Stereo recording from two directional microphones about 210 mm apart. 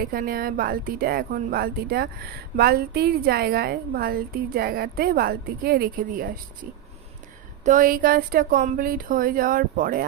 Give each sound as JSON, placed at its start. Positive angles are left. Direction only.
{"t": 0.0, "sound": "a woman's voice", "side_deg": -45}
{"t": 7.6, "sound": "a woman's voice", "side_deg": -40}